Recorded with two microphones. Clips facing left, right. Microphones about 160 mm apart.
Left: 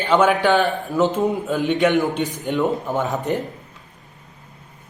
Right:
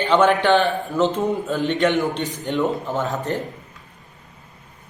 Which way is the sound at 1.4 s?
10° left (ahead or behind).